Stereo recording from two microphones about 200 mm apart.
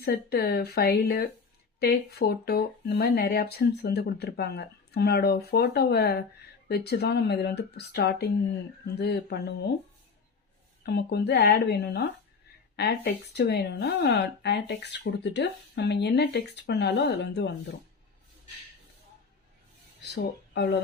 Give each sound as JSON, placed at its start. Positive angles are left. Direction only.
{"t": 0.0, "sound": "speech", "side_deg": 50}
{"t": 10.8, "sound": "speech", "side_deg": 55}
{"t": 20.1, "sound": "speech", "side_deg": 55}